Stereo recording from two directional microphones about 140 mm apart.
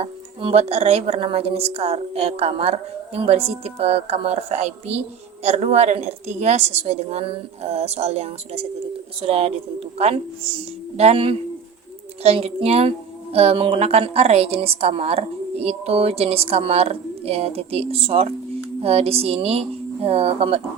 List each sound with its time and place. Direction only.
0.0 s a woman's voice: 45° right (ahead or behind)